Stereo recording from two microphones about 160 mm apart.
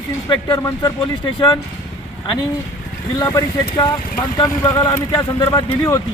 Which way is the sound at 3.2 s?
25° left (ahead or behind).